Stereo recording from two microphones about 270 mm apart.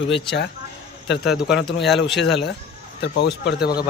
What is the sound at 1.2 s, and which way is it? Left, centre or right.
Speech, centre.